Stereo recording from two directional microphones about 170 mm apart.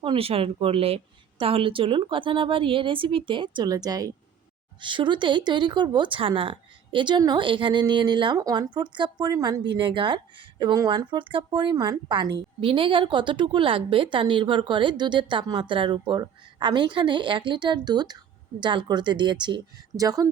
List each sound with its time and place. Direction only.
0.0 s a woman's voice: 35° right (ahead or behind)